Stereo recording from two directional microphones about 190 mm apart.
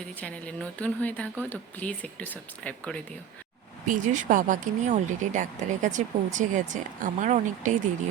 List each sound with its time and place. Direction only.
0.2 s speech: 5° left (ahead or behind)
3.8 s speech: 45° right (ahead or behind)